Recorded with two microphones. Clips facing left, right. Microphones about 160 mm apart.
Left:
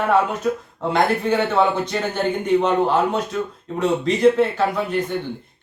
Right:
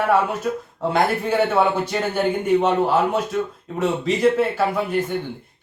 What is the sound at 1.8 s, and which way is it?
Speech, 10° right (ahead or behind).